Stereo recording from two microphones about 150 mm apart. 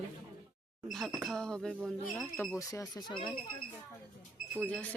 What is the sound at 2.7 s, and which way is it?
Speech, 25° left (ahead or behind).